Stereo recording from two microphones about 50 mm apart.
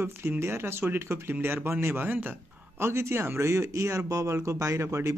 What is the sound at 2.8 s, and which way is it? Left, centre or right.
Speech, right.